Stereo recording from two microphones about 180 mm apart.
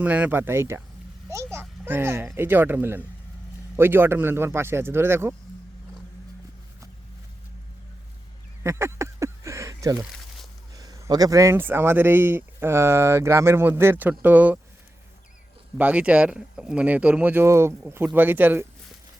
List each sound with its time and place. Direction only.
0.0 s speech: 10° right (ahead or behind)
8.6 s a sound: 15° right (ahead or behind)
10.8 s speech: 20° right (ahead or behind)
15.8 s speech: 10° right (ahead or behind)